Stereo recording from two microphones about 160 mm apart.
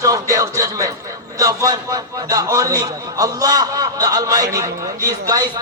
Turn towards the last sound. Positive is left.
turn(degrees=-20)  # may be behind; listen again after turning